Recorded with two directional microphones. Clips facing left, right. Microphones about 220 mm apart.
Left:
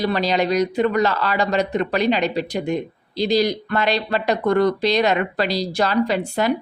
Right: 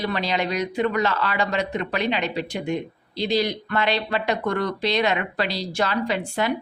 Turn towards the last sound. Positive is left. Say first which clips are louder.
# left 4 dB
turn(degrees=40)  # may be behind; listen again after turning